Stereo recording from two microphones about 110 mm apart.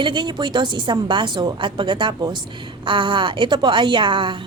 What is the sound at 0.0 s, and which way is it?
A woman's voice, 45° right (ahead or behind).